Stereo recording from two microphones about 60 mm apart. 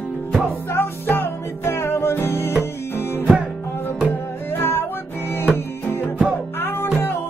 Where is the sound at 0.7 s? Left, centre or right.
Left.